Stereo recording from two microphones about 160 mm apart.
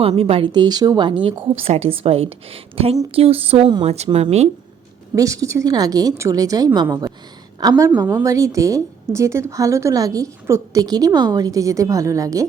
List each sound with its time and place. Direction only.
0.0 s speech: 35° right (ahead or behind)
5.1 s a woman's voice: 20° right (ahead or behind)